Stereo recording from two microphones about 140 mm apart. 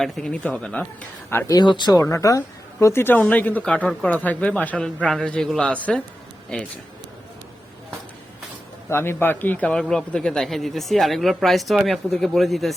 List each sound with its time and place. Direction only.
0.0 s speech: 5° left (ahead or behind)
1.5 s speech: 30° left (ahead or behind); by 6.0 s 10° left (ahead or behind)
8.9 s a man's voice: 15° left (ahead or behind); by 12.7 s centre (ahead or behind)